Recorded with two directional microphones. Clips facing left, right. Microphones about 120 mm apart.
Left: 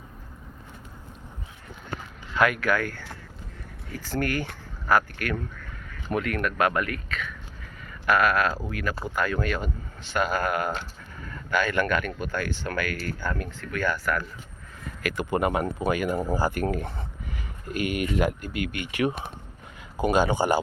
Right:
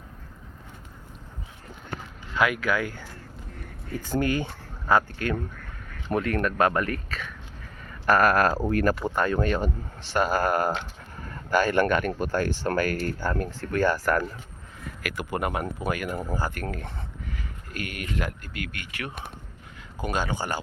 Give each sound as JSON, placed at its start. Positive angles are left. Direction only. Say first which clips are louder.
{"t": 2.4, "sound": "speech", "louder": "left 1 dB", "side_deg": -15}
{"t": 4.0, "sound": "speech", "louder": "right 2 dB", "side_deg": -20}
{"t": 9.0, "sound": "speech", "louder": "right 3 dB", "side_deg": -30}
{"t": 14.8, "sound": "speech", "louder": "left 4 dB", "side_deg": -10}